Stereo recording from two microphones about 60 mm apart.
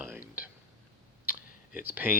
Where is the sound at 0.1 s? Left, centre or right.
Right.